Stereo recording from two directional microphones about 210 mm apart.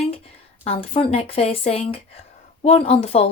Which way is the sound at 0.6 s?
25° left (ahead or behind).